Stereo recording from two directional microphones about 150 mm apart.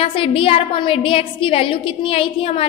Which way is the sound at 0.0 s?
35° left (ahead or behind).